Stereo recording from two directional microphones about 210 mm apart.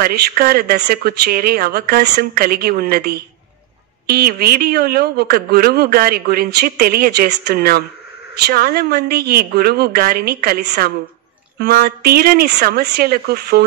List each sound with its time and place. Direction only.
0.0 s speech: 50° right (ahead or behind)